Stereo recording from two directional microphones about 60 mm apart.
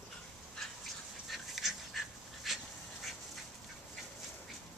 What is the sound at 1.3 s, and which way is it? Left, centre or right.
Dog, centre.